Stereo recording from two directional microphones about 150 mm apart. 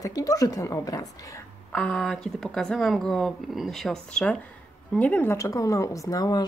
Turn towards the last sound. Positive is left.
turn(degrees=25)  # may be behind; listen again after turning